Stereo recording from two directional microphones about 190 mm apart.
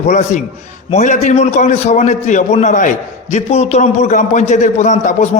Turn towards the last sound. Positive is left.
turn(degrees=40)  # may be behind; listen again after turning